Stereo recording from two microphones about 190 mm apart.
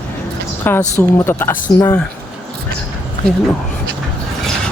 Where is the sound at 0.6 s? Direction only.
10° left (ahead or behind).